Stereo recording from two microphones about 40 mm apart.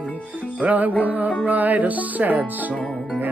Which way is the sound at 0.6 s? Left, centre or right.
Right.